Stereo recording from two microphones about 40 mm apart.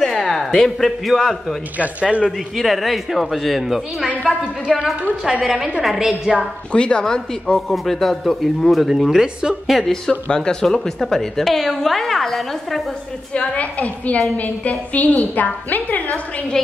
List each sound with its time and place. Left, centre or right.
0.3 s a sound: centre
0.7 s a woman's voice: centre
1.8 s speech: right
2.5 s speech: centre
4.2 s a woman's voice: centre
4.7 s a woman's voice: centre
6.7 s speech: left
7.5 s a woman's voice: centre
9.7 s speech: centre
10.0 s a woman's voice: left; by 12.8 s centre
13.3 s a woman's voice: left
16.6 s a woman's voice: centre